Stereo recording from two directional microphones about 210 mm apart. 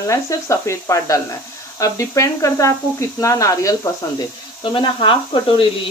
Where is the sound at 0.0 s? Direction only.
15° left (ahead or behind).